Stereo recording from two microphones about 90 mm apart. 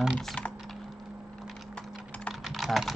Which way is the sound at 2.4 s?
Centre (ahead or behind).